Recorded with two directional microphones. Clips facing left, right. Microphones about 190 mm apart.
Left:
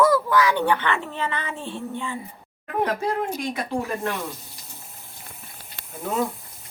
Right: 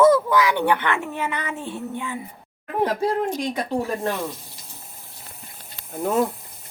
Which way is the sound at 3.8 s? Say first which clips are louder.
Right 2 dB; 30° right (ahead or behind).